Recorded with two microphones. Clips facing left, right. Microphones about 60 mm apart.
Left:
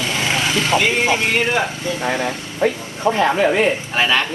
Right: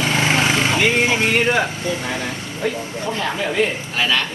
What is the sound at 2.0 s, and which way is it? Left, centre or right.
Speech, left.